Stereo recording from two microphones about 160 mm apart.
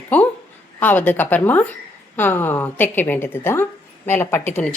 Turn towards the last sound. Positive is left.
turn(degrees=10)  # may be behind; listen again after turning